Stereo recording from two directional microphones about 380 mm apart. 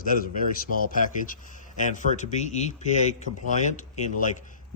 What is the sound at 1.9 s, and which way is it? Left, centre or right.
A man's voice, centre.